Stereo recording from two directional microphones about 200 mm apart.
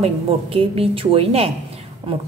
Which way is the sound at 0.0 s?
30° right (ahead or behind).